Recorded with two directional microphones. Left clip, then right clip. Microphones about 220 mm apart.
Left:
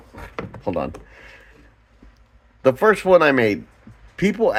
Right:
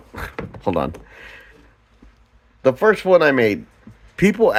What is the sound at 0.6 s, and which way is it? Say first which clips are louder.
Speech: right 4 dB; 25° right (ahead or behind).